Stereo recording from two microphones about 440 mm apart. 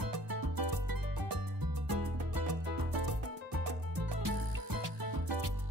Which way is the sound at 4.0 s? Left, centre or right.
Right.